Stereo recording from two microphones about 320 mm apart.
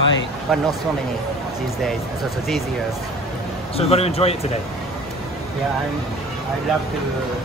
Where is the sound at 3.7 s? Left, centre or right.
Centre.